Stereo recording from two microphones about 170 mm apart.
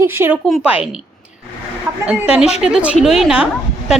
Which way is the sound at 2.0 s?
5° right (ahead or behind).